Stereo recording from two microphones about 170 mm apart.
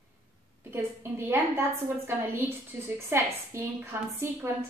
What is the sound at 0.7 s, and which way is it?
A woman's voice, 15° right (ahead or behind).